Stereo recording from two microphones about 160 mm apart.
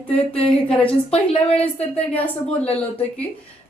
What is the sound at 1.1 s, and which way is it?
Speech, 35° left (ahead or behind).